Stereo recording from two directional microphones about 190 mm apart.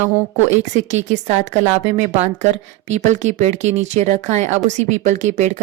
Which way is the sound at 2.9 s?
40° right (ahead or behind).